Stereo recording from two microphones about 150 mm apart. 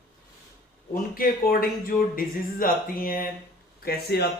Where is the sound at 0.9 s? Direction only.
70° left (ahead or behind).